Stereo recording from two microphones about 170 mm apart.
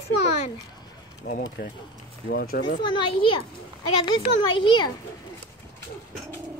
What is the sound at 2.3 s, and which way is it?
Speech, 75° left (ahead or behind).